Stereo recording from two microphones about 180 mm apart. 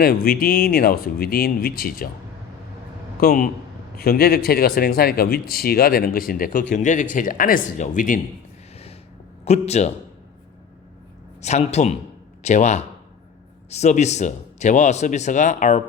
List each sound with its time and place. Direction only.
0.0 s speech: 55° left (ahead or behind)
3.2 s speech: 50° left (ahead or behind)
9.4 s a man's voice: 35° left (ahead or behind)
11.4 s speech: 40° left (ahead or behind)